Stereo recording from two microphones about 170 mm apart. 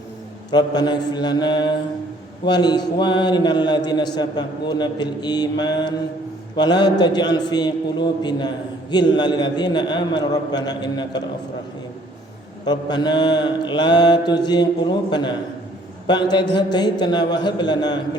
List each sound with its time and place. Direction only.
0.5 s a man's voice: 25° left (ahead or behind)
12.6 s a man's voice: 25° left (ahead or behind)